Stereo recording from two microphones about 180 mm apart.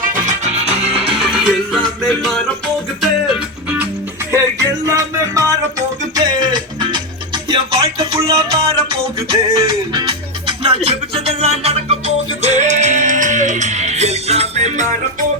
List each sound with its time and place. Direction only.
0.3 s music: 40° right (ahead or behind)
1.2 s music: centre (ahead or behind)
4.9 s music: 15° right (ahead or behind); by 14.8 s 40° right (ahead or behind)